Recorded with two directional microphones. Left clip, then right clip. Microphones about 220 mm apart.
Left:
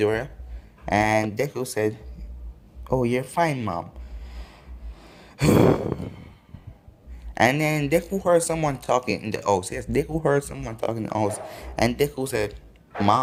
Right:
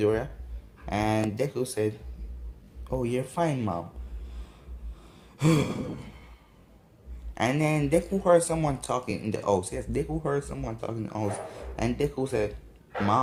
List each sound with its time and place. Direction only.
0.0 s speech: 40° left (ahead or behind)
5.0 s a sound: 40° left (ahead or behind)
7.3 s speech: 40° left (ahead or behind)